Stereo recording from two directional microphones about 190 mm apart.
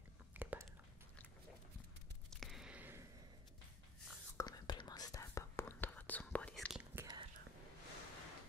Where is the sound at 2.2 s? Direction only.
Centre (ahead or behind).